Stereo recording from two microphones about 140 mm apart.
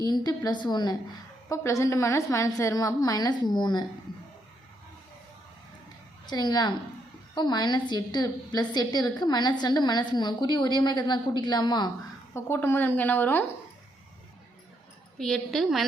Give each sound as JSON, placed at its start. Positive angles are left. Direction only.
{"t": 0.0, "sound": "a woman's voice", "side_deg": 30}
{"t": 6.2, "sound": "a woman's voice", "side_deg": 30}
{"t": 12.3, "sound": "a woman's voice", "side_deg": 20}
{"t": 15.2, "sound": "a woman's voice", "side_deg": 0}